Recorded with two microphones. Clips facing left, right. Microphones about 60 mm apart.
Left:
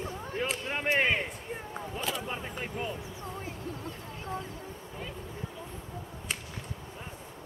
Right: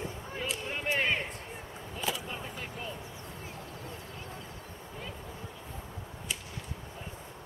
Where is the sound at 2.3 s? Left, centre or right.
Left.